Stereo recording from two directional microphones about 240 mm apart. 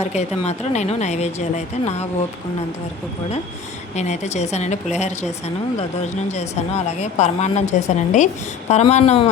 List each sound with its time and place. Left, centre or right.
0.0 s a woman's voice: left
3.9 s a woman's voice: left